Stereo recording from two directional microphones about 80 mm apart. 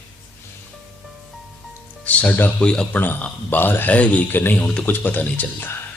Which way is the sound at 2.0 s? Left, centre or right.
Centre.